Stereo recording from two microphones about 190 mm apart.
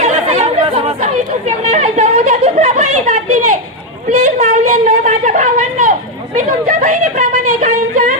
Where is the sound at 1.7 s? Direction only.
35° right (ahead or behind).